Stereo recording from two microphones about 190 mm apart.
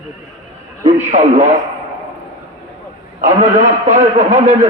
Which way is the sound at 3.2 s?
40° right (ahead or behind).